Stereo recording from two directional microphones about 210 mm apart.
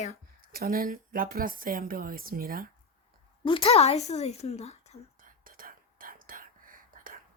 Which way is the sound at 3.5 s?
25° left (ahead or behind).